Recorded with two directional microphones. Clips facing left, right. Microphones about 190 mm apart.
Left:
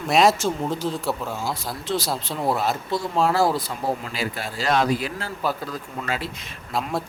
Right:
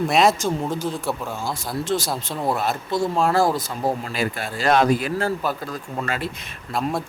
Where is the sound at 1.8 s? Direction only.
45° right (ahead or behind).